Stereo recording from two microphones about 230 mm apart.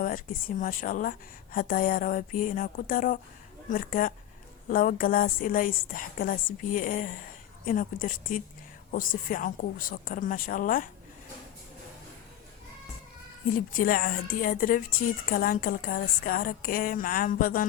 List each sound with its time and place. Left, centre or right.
0.0 s a woman's voice: left
13.7 s a woman's voice: left